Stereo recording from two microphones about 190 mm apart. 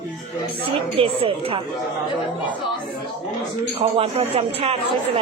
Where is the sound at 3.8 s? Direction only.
30° right (ahead or behind).